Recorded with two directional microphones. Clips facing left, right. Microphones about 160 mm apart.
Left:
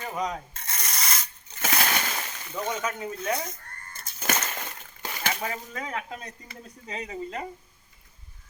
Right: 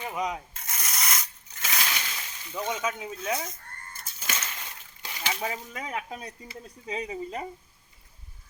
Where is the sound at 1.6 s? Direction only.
55° left (ahead or behind).